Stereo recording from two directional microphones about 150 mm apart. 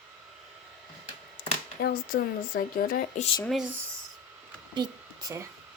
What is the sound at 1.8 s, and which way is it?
Speech, 85° left.